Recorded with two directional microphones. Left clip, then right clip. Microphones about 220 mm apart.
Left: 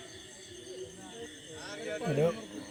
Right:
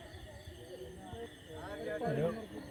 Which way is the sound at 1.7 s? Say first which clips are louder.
Left 2 dB; 35° left (ahead or behind).